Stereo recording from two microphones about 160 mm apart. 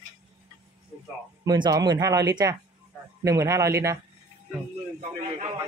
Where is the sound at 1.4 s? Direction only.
25° right (ahead or behind).